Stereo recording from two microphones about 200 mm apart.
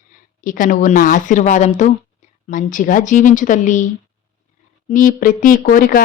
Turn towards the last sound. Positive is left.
turn(degrees=45)  # may be behind; listen again after turning